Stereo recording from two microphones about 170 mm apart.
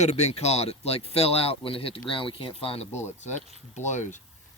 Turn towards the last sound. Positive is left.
turn(degrees=45)  # may be behind; listen again after turning